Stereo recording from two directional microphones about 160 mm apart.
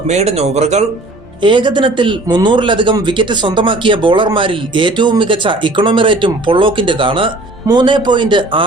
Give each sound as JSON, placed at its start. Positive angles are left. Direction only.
{"t": 0.1, "sound": "speech", "side_deg": -45}
{"t": 1.4, "sound": "a man's voice", "side_deg": -30}